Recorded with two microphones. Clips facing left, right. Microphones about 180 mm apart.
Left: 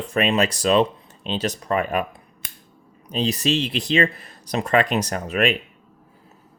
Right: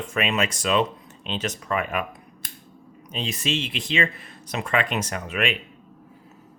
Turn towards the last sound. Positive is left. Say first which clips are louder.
# left 5 dB
turn(degrees=40)  # may be behind; listen again after turning